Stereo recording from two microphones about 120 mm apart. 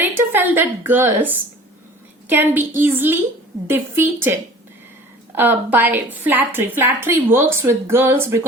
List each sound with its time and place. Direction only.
0.0 s a woman's voice: 15° right (ahead or behind)